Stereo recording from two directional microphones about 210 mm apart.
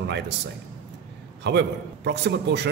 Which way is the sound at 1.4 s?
55° right (ahead or behind).